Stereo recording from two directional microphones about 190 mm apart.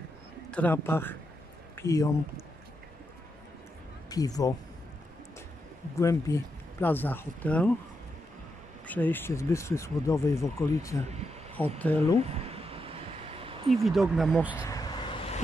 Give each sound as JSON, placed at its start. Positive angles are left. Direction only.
{"t": 0.5, "sound": "speech", "side_deg": 10}
{"t": 4.1, "sound": "speech", "side_deg": 20}
{"t": 5.9, "sound": "speech", "side_deg": 15}
{"t": 8.8, "sound": "speech", "side_deg": 10}
{"t": 12.2, "sound": "a sound", "side_deg": -30}
{"t": 13.7, "sound": "speech", "side_deg": 0}
{"t": 14.6, "sound": "vehicle", "side_deg": 20}